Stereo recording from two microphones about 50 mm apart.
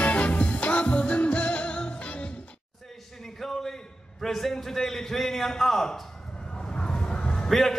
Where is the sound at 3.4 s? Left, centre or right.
Centre.